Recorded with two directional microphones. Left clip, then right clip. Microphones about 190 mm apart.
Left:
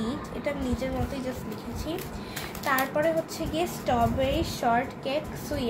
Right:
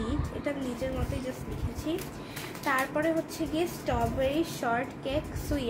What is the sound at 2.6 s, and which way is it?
A child's voice, 20° right (ahead or behind).